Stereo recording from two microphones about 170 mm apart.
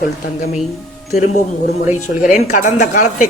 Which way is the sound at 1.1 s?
45° left (ahead or behind).